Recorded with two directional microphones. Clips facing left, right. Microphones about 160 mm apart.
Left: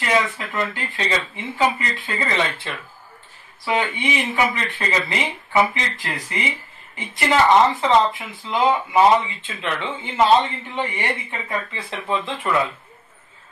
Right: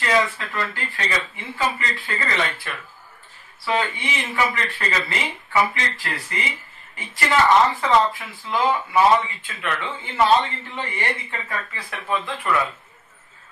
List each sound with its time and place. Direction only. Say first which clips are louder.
0.0 s speech: even; 20° left (ahead or behind)